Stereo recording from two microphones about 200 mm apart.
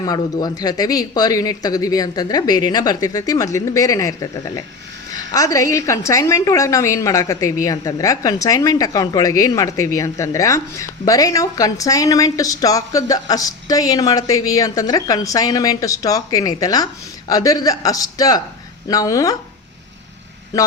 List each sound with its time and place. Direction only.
0.0 s a woman's voice: 20° left (ahead or behind)